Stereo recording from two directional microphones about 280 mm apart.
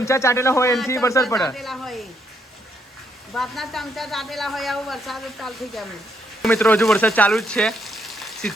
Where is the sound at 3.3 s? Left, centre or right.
Centre.